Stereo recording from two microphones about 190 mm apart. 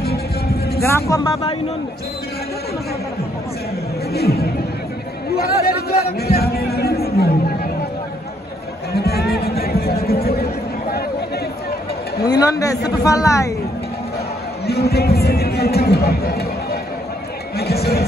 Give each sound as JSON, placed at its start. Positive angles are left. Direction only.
{"t": 0.8, "sound": "speech", "side_deg": 15}
{"t": 4.1, "sound": "chatter", "side_deg": 55}
{"t": 5.3, "sound": "a sound", "side_deg": 55}
{"t": 8.9, "sound": "music", "side_deg": 55}
{"t": 12.2, "sound": "a man's voice", "side_deg": 20}
{"t": 14.7, "sound": "speech", "side_deg": 55}
{"t": 17.6, "sound": "music", "side_deg": 55}